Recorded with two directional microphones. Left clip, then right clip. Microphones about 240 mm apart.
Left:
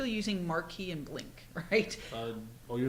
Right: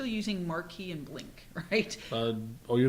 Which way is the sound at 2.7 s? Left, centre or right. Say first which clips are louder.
Right 8 dB; right.